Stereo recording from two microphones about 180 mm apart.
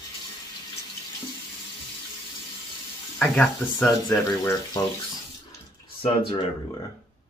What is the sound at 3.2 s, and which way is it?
Speech, 5° left (ahead or behind).